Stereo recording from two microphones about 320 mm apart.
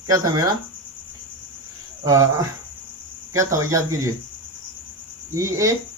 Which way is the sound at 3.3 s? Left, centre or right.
Centre.